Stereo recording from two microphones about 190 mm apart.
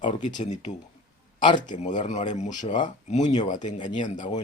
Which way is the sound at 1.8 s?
40° left (ahead or behind).